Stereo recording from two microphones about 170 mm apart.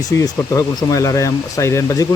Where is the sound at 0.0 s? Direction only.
20° left (ahead or behind).